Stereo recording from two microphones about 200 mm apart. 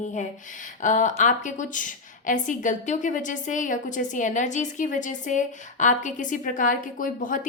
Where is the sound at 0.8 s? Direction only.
40° left (ahead or behind).